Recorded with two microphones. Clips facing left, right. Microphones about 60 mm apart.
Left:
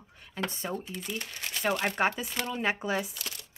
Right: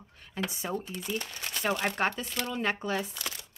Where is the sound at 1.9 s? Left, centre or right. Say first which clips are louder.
Left 2 dB; centre.